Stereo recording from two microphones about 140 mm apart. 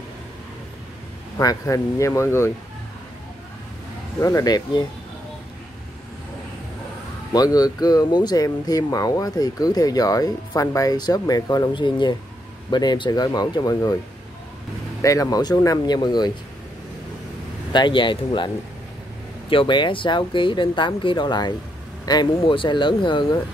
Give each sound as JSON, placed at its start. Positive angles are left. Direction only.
{"t": 1.4, "sound": "speech", "side_deg": 25}
{"t": 4.2, "sound": "speech", "side_deg": 25}
{"t": 7.3, "sound": "speech", "side_deg": 25}
{"t": 15.0, "sound": "speech", "side_deg": 25}
{"t": 17.7, "sound": "speech", "side_deg": 35}
{"t": 19.5, "sound": "speech", "side_deg": 35}